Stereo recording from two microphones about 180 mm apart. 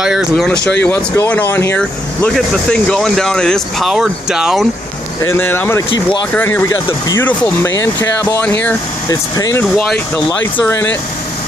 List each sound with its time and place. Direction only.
0.0 s speech: centre (ahead or behind)
0.8 s speech: 15° left (ahead or behind); by 4.6 s 5° right (ahead or behind)
5.2 s speech: 15° left (ahead or behind)